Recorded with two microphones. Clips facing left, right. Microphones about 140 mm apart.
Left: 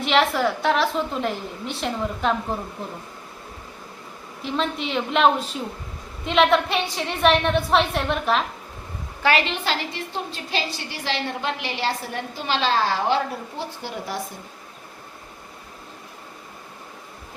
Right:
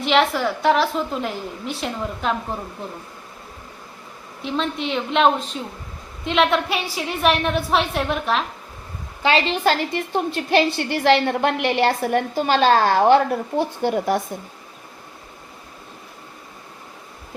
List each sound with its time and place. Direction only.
0.0 s a woman's voice: centre (ahead or behind)
4.4 s a woman's voice: centre (ahead or behind)
9.5 s a woman's voice: 45° right (ahead or behind)